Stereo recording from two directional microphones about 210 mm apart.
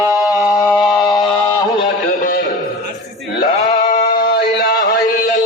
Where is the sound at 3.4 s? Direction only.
35° left (ahead or behind).